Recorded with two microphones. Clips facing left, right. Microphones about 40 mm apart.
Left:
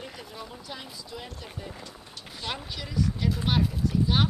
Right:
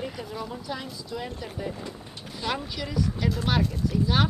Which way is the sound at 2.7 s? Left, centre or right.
Centre.